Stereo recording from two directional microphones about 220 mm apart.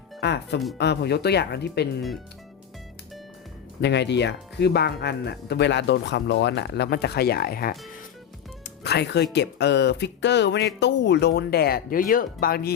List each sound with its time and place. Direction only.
0.2 s speech: 50° left (ahead or behind)
3.8 s speech: 50° left (ahead or behind)